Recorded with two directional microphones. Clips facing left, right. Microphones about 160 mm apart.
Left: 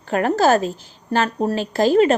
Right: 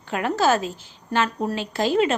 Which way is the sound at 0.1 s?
45° left (ahead or behind).